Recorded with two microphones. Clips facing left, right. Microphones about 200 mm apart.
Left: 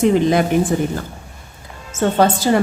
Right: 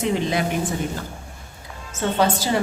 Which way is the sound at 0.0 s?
50° left (ahead or behind).